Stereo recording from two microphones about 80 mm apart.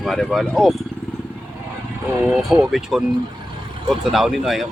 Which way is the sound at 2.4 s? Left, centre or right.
Centre.